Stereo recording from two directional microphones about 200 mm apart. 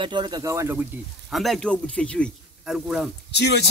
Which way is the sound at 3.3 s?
55° left (ahead or behind).